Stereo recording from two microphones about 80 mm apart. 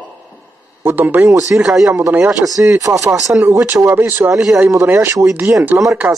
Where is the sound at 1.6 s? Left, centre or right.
Centre.